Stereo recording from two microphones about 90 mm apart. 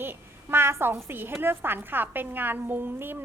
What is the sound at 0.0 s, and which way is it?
A woman's voice, 25° right (ahead or behind).